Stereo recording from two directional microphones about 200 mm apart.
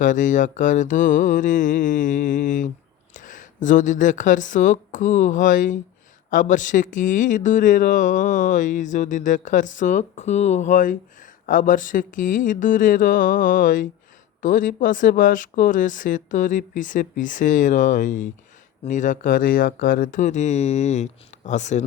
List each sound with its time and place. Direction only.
0.0 s speech: 40° left (ahead or behind)